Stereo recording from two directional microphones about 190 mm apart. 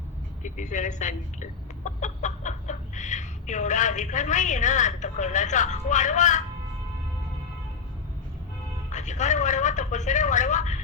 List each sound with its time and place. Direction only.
0.4 s speech: 40° left (ahead or behind)
8.9 s speech: 40° left (ahead or behind)